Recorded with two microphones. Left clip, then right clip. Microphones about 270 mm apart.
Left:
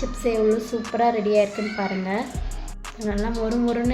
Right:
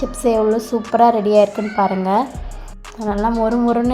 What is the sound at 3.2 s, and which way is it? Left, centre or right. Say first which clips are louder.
Speech: right 9 dB; centre.